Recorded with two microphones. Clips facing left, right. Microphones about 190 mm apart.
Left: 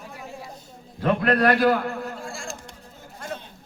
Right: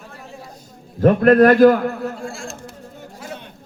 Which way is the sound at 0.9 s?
45° right (ahead or behind).